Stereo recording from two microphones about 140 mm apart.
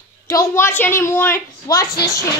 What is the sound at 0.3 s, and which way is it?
A woman's voice, 20° left (ahead or behind).